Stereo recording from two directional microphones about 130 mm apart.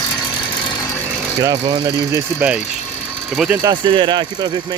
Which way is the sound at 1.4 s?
35° right (ahead or behind).